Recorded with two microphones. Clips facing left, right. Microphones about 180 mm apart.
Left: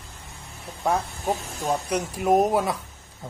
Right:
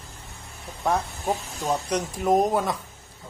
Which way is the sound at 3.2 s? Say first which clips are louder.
Left 6 dB; 45° left (ahead or behind).